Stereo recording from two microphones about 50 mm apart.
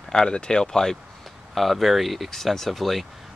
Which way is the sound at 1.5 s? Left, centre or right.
Centre.